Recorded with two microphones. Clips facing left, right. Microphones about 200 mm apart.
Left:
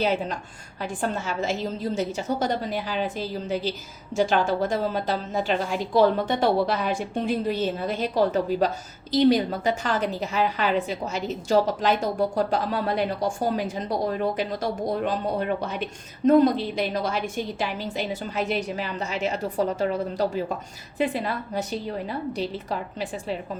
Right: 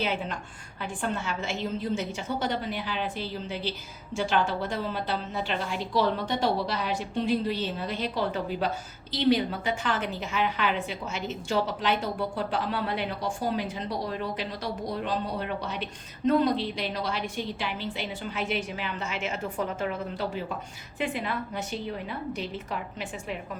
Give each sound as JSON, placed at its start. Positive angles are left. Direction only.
{"t": 0.0, "sound": "a woman's voice", "side_deg": 40}